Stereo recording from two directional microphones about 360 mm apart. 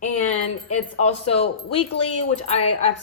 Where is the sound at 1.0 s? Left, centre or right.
Centre.